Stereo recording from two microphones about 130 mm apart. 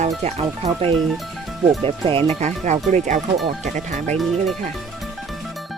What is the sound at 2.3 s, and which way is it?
Speech, 60° right (ahead or behind).